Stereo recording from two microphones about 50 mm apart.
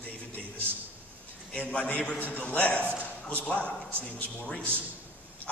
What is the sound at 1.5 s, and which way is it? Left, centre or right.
A man's voice, left.